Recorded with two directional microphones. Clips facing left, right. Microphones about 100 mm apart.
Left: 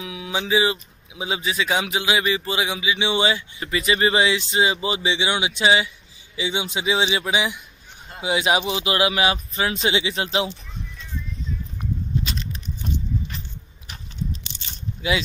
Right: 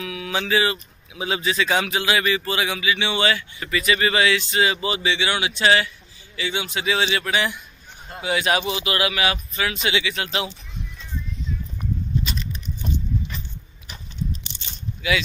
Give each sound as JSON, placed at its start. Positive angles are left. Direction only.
{"t": 0.0, "sound": "a man's voice", "side_deg": 15}
{"t": 15.0, "sound": "speech", "side_deg": 30}